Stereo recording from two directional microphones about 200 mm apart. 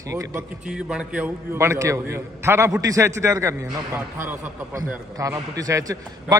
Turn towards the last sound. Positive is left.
turn(degrees=-15)  # may be behind; listen again after turning